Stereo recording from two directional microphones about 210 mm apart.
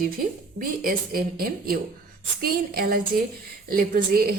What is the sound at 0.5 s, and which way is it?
A woman's voice, 45° right (ahead or behind).